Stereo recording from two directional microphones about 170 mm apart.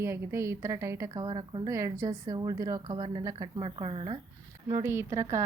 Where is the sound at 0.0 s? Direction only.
15° right (ahead or behind).